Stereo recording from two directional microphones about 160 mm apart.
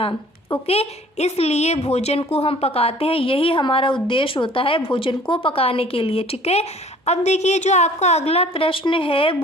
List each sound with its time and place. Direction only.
0.7 s a woman's voice: 40° left (ahead or behind)